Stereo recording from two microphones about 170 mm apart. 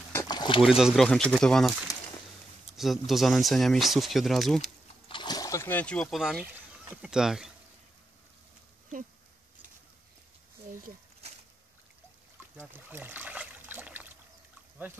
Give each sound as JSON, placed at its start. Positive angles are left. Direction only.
{"t": 0.1, "sound": "rowboat", "side_deg": 20}
{"t": 0.6, "sound": "speech", "side_deg": -5}
{"t": 1.9, "sound": "a sound", "side_deg": 20}
{"t": 2.7, "sound": "speech", "side_deg": 0}
{"t": 5.0, "sound": "speech", "side_deg": 30}
{"t": 12.5, "sound": "trickle", "side_deg": -10}